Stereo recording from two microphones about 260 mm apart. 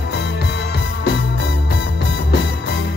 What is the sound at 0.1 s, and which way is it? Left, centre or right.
Music, left.